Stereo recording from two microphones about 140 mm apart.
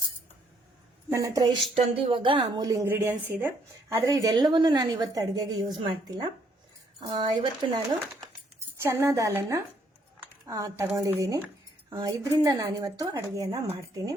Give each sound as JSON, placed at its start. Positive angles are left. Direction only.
{"t": 1.1, "sound": "a woman's voice", "side_deg": -25}
{"t": 1.7, "sound": "a woman's voice", "side_deg": -40}
{"t": 3.9, "sound": "a woman's voice", "side_deg": -25}
{"t": 8.8, "sound": "a woman's voice", "side_deg": -20}
{"t": 10.2, "sound": "a sound", "side_deg": -25}
{"t": 10.9, "sound": "a woman's voice", "side_deg": -25}